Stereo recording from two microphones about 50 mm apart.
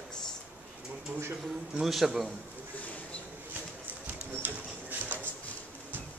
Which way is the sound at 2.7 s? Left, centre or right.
Left.